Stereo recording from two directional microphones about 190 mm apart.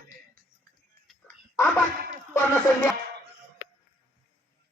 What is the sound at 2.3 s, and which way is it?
Music, 10° left (ahead or behind).